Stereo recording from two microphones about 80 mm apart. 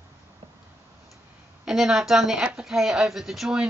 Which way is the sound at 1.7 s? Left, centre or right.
Centre.